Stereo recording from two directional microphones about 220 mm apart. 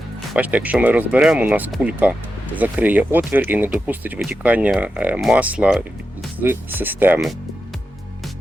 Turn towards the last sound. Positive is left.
turn(degrees=-5)  # may be behind; listen again after turning